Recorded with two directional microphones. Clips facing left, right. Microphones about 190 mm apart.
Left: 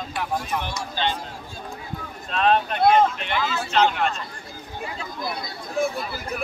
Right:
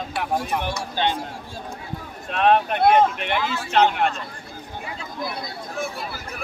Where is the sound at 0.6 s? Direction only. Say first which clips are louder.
Right 3 dB; 55° right (ahead or behind).